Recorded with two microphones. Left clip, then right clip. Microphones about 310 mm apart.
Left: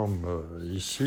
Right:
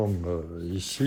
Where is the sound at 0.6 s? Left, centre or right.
Centre.